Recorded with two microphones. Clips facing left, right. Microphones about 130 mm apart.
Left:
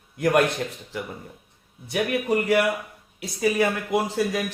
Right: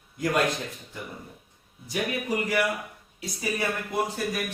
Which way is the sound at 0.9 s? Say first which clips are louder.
Left 9 dB; 90° left.